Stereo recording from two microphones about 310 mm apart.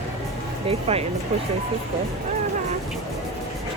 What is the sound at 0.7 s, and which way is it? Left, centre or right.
Speech, centre.